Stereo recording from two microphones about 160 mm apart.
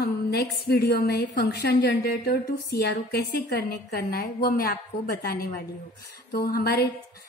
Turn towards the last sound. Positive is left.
turn(degrees=75)  # may be behind; listen again after turning